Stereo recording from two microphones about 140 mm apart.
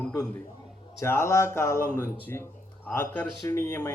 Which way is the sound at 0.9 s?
20° left (ahead or behind).